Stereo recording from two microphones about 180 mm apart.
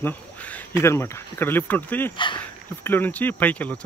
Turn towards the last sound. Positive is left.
turn(degrees=10)  # may be behind; listen again after turning